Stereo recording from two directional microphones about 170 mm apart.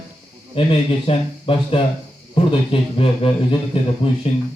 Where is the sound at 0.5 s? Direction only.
30° left (ahead or behind).